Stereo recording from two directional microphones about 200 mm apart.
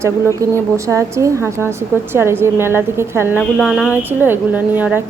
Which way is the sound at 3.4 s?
Centre (ahead or behind).